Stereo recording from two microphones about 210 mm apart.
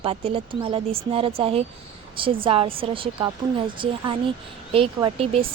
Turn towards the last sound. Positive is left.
turn(degrees=-25)  # may be behind; listen again after turning